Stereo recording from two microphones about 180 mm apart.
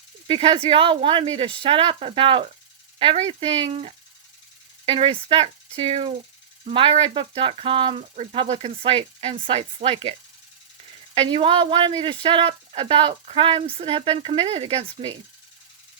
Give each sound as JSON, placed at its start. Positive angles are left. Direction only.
{"t": 0.3, "sound": "speech", "side_deg": -30}